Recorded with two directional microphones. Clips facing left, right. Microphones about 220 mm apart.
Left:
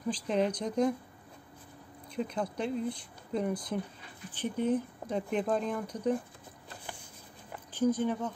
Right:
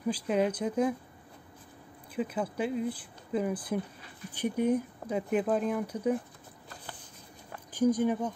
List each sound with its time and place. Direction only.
0.1 s speech: 5° right (ahead or behind)
2.1 s speech: 5° right (ahead or behind)
7.7 s speech: 10° right (ahead or behind)